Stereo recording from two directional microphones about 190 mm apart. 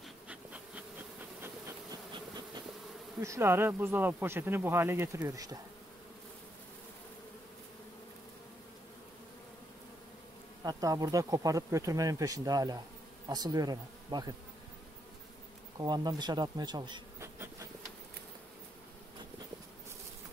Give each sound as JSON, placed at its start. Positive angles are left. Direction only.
{"t": 0.3, "sound": "insect", "side_deg": -5}
{"t": 1.4, "sound": "bee", "side_deg": -20}
{"t": 3.2, "sound": "speech", "side_deg": -15}
{"t": 10.6, "sound": "speech", "side_deg": -20}
{"t": 13.3, "sound": "bee", "side_deg": -20}
{"t": 15.8, "sound": "bee", "side_deg": -20}